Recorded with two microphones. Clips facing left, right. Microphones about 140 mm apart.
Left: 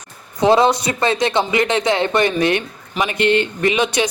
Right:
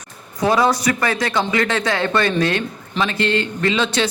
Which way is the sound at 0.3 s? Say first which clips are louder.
Left 3 dB; 25° left (ahead or behind).